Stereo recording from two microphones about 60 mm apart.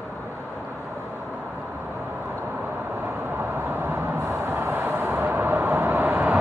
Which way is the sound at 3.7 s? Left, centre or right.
Right.